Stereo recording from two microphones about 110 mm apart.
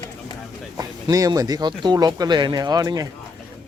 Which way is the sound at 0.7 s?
35° right (ahead or behind).